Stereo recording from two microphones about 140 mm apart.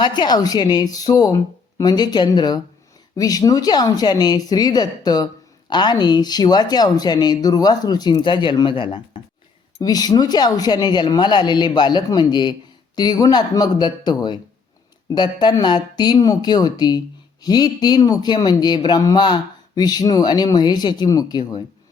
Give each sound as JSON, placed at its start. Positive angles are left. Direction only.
{"t": 0.2, "sound": "speech", "side_deg": 30}